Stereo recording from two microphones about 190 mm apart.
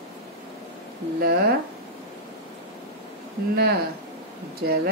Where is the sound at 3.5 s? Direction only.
55° right (ahead or behind).